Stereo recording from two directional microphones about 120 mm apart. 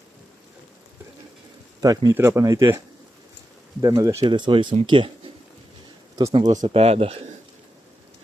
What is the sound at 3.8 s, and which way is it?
Speech, 30° right (ahead or behind).